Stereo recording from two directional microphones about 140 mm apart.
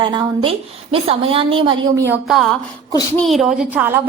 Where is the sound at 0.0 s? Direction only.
35° right (ahead or behind).